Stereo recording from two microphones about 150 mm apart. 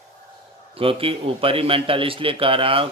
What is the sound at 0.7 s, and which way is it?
A man's voice, 40° right (ahead or behind).